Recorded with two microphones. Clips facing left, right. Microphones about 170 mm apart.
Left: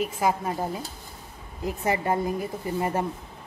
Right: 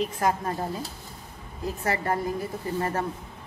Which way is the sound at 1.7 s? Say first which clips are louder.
Left 2 dB; 15° left (ahead or behind).